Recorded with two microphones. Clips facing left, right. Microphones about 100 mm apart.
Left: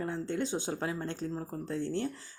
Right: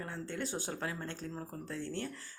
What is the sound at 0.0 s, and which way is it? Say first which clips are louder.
Speech: left 6 dB; 25° left (ahead or behind).